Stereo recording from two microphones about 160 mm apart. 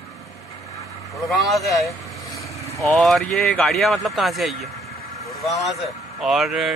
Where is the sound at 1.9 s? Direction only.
20° left (ahead or behind).